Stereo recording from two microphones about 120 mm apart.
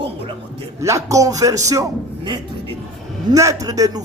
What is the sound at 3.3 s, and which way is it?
Speech, 30° right (ahead or behind).